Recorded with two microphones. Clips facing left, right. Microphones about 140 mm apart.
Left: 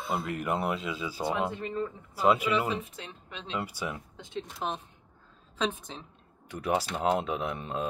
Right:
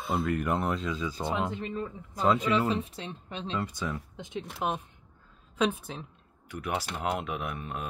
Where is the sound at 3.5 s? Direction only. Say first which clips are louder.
Even; 10° left (ahead or behind).